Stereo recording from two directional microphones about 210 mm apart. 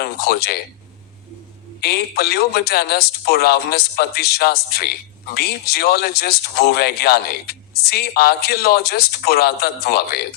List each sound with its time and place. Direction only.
0.0 s a man's voice: 50° left (ahead or behind)
1.8 s a man's voice: 50° left (ahead or behind)